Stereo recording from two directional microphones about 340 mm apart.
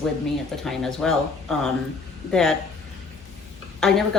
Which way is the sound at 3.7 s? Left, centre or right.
Centre.